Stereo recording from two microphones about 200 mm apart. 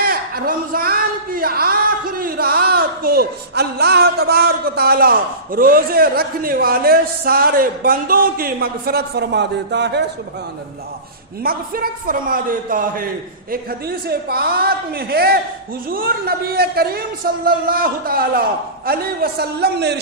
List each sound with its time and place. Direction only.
0.0 s speech: 50° right (ahead or behind)
11.4 s a man's voice: 45° right (ahead or behind)